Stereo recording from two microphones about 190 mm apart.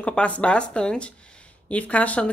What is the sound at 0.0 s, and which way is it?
A woman's voice, 5° left (ahead or behind).